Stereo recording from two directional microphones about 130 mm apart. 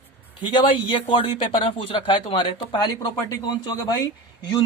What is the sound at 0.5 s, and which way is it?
A man's voice, 35° left (ahead or behind).